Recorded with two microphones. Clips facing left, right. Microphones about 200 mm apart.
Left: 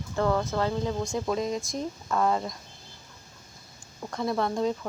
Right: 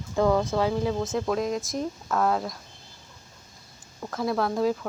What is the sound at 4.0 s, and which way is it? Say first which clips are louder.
Speech: right 1 dB; centre (ahead or behind).